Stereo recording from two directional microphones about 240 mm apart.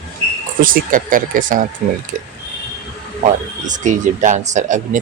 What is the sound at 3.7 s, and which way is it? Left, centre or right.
Speech, right.